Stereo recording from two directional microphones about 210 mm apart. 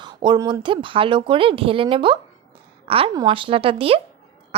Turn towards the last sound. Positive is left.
turn(degrees=-25)  # may be behind; listen again after turning